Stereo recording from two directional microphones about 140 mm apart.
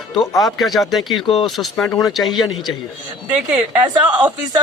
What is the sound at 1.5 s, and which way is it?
Speech, centre (ahead or behind).